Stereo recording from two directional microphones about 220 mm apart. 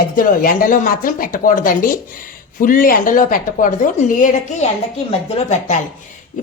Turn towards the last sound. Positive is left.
turn(degrees=35)  # may be behind; listen again after turning